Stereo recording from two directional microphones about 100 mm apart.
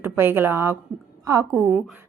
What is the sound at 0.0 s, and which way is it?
A woman's voice, 25° right (ahead or behind).